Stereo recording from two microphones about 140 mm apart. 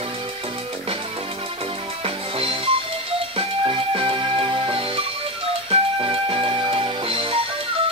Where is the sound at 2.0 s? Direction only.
40° right (ahead or behind).